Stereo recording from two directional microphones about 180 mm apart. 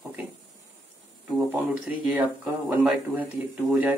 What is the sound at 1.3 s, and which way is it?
Speech, 5° right (ahead or behind).